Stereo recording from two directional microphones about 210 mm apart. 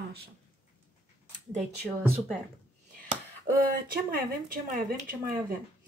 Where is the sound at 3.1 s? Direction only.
40° right (ahead or behind).